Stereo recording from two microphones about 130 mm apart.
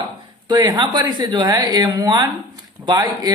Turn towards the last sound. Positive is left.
turn(degrees=-30)  # may be behind; listen again after turning